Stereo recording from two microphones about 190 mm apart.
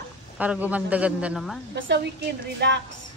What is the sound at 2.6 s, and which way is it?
Speech, 65° right (ahead or behind).